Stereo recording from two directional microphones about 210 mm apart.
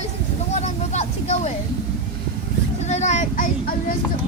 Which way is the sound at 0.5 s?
30° left (ahead or behind).